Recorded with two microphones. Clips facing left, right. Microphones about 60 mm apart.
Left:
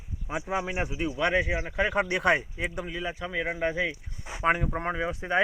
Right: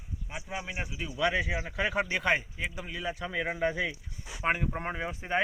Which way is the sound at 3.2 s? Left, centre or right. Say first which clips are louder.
Left 2 dB; centre.